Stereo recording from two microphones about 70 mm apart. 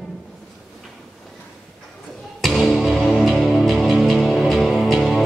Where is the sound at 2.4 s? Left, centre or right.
Centre.